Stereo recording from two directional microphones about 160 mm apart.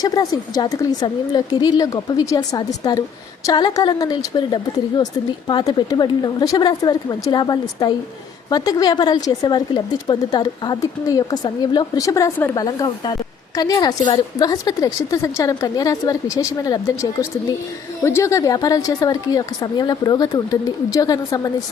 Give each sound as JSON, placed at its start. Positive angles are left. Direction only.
{"t": 0.0, "sound": "a woman's voice", "side_deg": 25}